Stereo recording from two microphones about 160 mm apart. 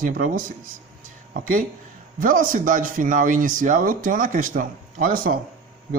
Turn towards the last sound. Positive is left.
turn(degrees=-60)  # may be behind; listen again after turning